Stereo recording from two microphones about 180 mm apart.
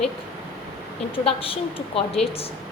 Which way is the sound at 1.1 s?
30° left (ahead or behind).